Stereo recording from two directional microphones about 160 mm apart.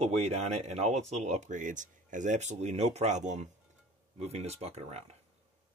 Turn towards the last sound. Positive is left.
turn(degrees=-40)  # may be behind; listen again after turning